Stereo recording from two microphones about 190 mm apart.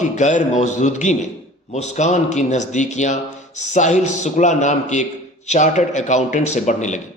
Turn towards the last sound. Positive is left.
turn(degrees=40)  # may be behind; listen again after turning